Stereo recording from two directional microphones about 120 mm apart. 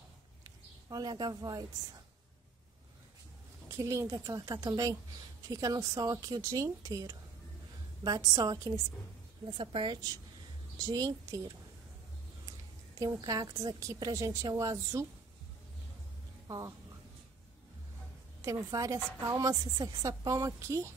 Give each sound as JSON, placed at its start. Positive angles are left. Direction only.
{"t": 0.4, "sound": "a sound", "side_deg": -30}
{"t": 3.6, "sound": "a woman's voice", "side_deg": -25}
{"t": 9.6, "sound": "a woman's voice", "side_deg": -45}
{"t": 10.8, "sound": "speech", "side_deg": -35}
{"t": 13.0, "sound": "a woman's voice", "side_deg": -30}
{"t": 16.4, "sound": "a woman's voice", "side_deg": -35}
{"t": 18.4, "sound": "a woman's voice", "side_deg": -30}